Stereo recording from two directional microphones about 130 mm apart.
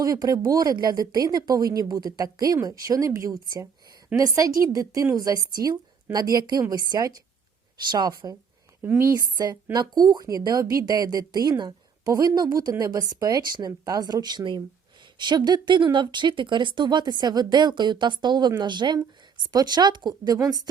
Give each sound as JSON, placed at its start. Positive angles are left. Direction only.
{"t": 0.0, "sound": "speech", "side_deg": -30}
{"t": 4.1, "sound": "a woman's voice", "side_deg": -10}
{"t": 4.6, "sound": "speech", "side_deg": -25}
{"t": 8.8, "sound": "speech", "side_deg": -20}